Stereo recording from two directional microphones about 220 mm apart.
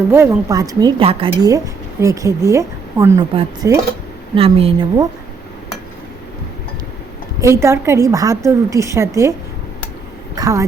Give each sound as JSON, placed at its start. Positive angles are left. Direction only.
{"t": 0.1, "sound": "a woman's voice", "side_deg": -15}
{"t": 7.4, "sound": "speech", "side_deg": -10}
{"t": 10.3, "sound": "speech", "side_deg": -15}